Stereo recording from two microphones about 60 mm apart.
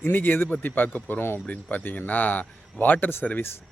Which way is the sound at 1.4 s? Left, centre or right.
Left.